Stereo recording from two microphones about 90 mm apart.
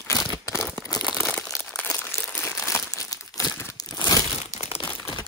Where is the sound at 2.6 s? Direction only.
35° left (ahead or behind).